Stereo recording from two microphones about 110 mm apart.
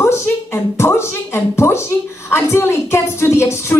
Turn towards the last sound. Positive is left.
turn(degrees=25)  # may be behind; listen again after turning